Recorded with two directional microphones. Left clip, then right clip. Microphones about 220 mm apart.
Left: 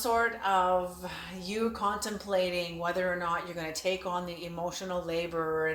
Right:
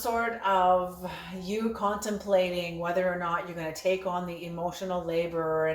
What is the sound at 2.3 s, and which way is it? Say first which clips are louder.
Speech: right 4 dB; 20° left (ahead or behind).